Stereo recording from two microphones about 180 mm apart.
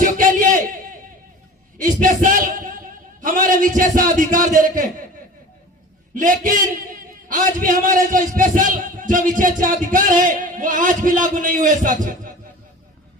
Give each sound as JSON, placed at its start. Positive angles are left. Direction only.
{"t": 0.0, "sound": "a sound", "side_deg": -45}
{"t": 1.8, "sound": "a man's voice", "side_deg": -45}
{"t": 6.1, "sound": "a man's voice", "side_deg": -50}